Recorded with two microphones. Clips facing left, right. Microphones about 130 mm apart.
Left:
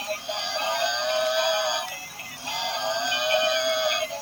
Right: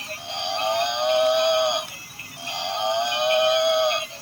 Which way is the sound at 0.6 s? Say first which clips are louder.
Right 5 dB; 65° right (ahead or behind).